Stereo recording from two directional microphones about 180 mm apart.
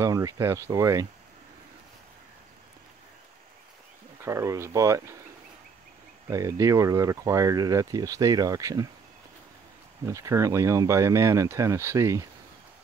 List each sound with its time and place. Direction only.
0.0 s speech: 20° right (ahead or behind)
4.2 s speech: 15° right (ahead or behind)
6.3 s speech: 15° right (ahead or behind)
10.0 s speech: 15° right (ahead or behind)